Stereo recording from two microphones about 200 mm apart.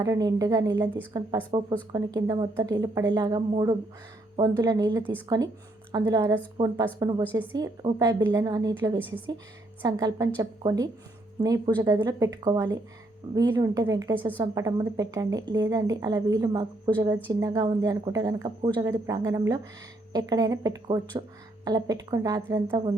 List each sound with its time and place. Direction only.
0.0 s a woman's voice: 20° right (ahead or behind)